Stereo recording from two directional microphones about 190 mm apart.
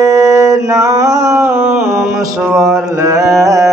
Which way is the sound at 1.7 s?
Centre (ahead or behind).